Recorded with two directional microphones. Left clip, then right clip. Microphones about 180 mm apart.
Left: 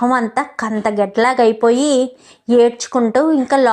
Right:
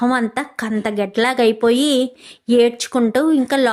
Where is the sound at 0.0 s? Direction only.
20° right (ahead or behind).